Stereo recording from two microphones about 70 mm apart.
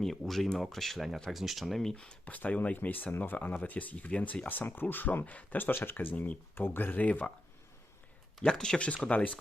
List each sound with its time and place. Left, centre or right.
0.0 s speech: centre; by 7.3 s left
8.4 s speech: centre